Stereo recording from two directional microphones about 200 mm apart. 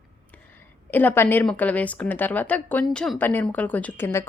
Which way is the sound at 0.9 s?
10° left (ahead or behind).